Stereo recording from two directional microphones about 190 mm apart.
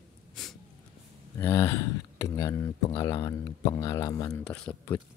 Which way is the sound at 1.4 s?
15° left (ahead or behind).